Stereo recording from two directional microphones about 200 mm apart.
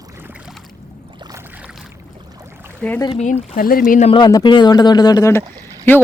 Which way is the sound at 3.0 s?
30° left (ahead or behind).